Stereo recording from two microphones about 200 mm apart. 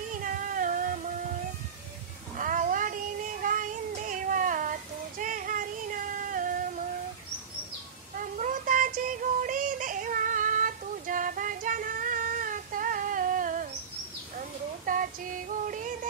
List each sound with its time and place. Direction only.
0.1 s a sound: 40° right (ahead or behind)
2.3 s child singing: 40° right (ahead or behind)
8.2 s synthetic singing: 40° right (ahead or behind)
14.9 s female singing: 40° right (ahead or behind)